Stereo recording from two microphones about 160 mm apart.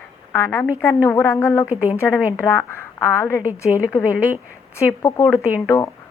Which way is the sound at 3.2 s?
15° left (ahead or behind).